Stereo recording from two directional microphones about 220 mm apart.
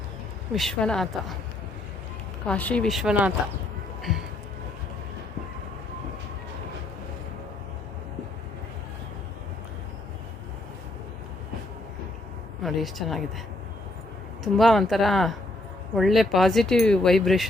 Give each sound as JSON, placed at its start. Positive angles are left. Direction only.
{"t": 0.5, "sound": "speech", "side_deg": 0}
{"t": 2.5, "sound": "speech", "side_deg": 5}
{"t": 12.6, "sound": "speech", "side_deg": 0}
{"t": 14.4, "sound": "speech", "side_deg": 0}